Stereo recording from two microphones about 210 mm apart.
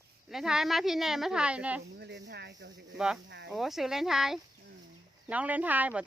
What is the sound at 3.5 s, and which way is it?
Speech, centre (ahead or behind).